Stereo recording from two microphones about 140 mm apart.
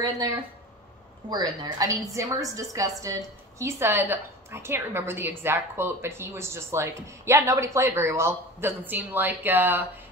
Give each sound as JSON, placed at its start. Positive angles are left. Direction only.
{"t": 1.3, "sound": "a woman's voice", "side_deg": -25}